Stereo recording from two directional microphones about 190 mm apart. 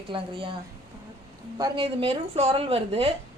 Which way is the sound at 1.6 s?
25° right (ahead or behind).